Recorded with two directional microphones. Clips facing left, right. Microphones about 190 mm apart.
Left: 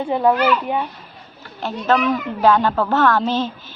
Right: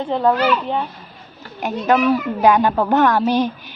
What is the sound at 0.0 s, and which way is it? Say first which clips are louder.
Speech: even; 10° left (ahead or behind).